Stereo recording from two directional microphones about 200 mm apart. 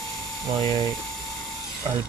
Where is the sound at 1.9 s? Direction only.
20° right (ahead or behind).